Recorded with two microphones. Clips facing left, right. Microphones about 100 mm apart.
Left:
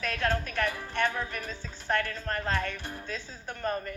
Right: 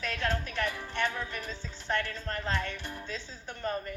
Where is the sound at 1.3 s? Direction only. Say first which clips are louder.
Left 1 dB; 50° left (ahead or behind).